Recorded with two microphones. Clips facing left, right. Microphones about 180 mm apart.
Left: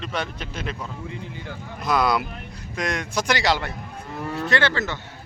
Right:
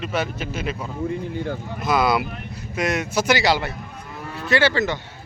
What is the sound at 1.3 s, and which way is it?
Speech, 50° right (ahead or behind).